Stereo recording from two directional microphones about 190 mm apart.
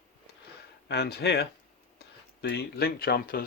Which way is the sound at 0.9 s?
60° left (ahead or behind).